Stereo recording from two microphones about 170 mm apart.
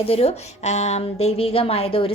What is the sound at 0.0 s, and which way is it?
A woman's voice, 35° left (ahead or behind).